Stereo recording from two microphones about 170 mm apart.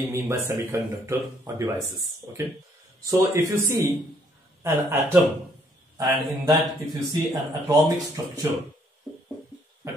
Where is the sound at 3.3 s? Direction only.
15° right (ahead or behind).